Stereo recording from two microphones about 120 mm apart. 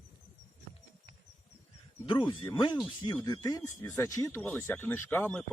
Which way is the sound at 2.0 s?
40° left (ahead or behind).